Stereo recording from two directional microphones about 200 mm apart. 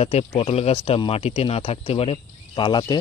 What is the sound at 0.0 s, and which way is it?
Speech, 30° left (ahead or behind).